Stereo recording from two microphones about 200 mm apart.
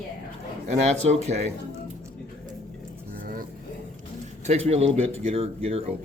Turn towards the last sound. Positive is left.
turn(degrees=-30)  # may be behind; listen again after turning